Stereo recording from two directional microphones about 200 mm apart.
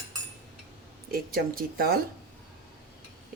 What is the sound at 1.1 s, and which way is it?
Speech, 50° right (ahead or behind).